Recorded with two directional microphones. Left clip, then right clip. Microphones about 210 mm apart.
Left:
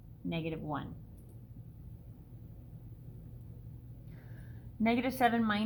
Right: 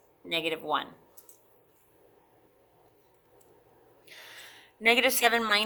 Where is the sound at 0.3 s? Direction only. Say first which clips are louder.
Right 9 dB; 30° right (ahead or behind).